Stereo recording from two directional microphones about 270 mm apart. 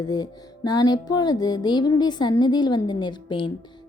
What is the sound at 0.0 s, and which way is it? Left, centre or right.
Music, centre.